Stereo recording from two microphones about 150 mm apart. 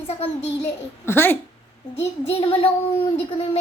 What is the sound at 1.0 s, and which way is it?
Speech, 15° left (ahead or behind).